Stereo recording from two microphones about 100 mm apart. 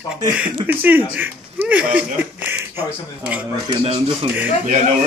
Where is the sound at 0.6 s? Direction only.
15° right (ahead or behind).